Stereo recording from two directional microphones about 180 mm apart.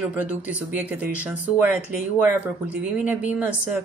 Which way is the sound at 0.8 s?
10° right (ahead or behind).